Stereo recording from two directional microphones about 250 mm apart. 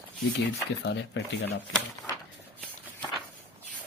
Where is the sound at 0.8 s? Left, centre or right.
Left.